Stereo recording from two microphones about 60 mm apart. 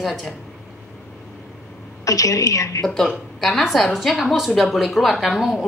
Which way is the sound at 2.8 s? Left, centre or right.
Centre.